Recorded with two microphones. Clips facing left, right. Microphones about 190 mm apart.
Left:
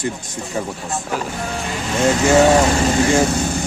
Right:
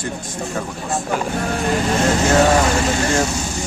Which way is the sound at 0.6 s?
15° left (ahead or behind).